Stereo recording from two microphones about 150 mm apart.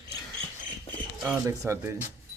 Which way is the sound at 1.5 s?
20° right (ahead or behind).